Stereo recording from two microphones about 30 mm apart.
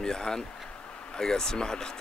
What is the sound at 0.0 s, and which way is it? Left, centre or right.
Speech, left.